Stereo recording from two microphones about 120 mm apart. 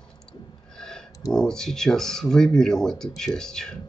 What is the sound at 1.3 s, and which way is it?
Speech, 5° left (ahead or behind).